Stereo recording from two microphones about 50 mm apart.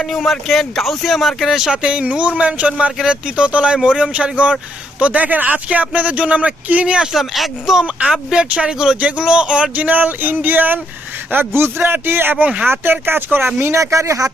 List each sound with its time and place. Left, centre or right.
0.0 s speech: centre
1.7 s speech: right
4.9 s a sound: right
5.6 s speech: right
7.1 s speech: centre
8.1 s speech: centre
9.0 s speech: right
9.7 s a sound: right
11.3 s a man's voice: right
13.7 s speech: right